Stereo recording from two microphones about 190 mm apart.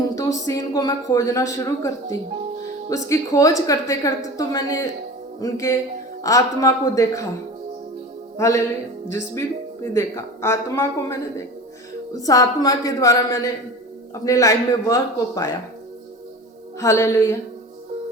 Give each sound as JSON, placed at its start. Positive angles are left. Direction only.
{"t": 0.2, "sound": "a woman's voice", "side_deg": 15}
{"t": 2.9, "sound": "a woman's voice", "side_deg": 15}
{"t": 8.4, "sound": "a woman's voice", "side_deg": 15}
{"t": 9.8, "sound": "a woman's voice", "side_deg": 15}
{"t": 16.8, "sound": "a woman's voice", "side_deg": 15}